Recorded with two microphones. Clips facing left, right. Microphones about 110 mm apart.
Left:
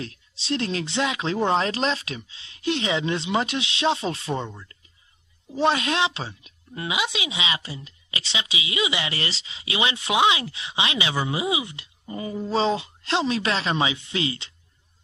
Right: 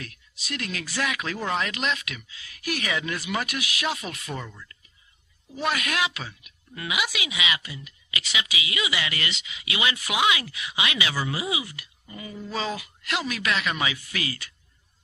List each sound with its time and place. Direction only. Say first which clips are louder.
0.0 s a woman's voice: left 5 dB; 30° left (ahead or behind)